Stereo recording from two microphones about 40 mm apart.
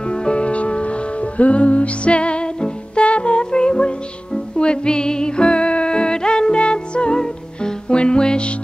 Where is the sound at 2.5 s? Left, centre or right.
Centre.